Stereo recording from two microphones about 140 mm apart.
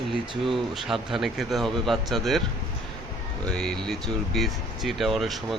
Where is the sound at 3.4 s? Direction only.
5° left (ahead or behind).